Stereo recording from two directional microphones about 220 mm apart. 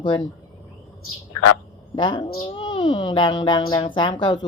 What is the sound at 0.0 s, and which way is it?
Speech, 20° left (ahead or behind).